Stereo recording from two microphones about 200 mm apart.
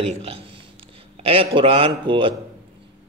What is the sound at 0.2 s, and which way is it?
Speech, 30° right (ahead or behind).